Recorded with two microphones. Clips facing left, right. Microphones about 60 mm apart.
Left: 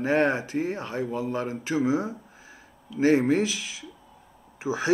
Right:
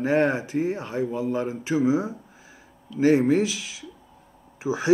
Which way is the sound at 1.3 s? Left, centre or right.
Left.